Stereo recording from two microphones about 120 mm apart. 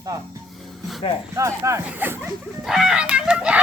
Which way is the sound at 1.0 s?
45° left (ahead or behind).